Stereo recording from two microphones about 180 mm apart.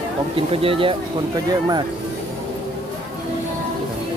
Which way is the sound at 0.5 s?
30° right (ahead or behind).